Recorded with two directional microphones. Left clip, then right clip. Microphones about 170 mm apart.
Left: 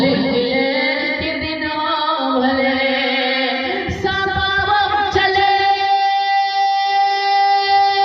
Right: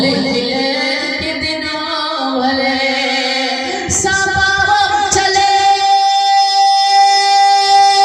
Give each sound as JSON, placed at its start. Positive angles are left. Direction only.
{"t": 4.4, "sound": "music", "side_deg": -35}